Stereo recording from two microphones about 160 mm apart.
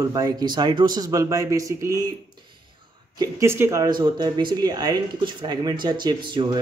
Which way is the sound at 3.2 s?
15° right (ahead or behind).